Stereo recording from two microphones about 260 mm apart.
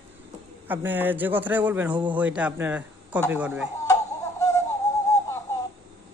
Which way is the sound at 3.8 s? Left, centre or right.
Centre.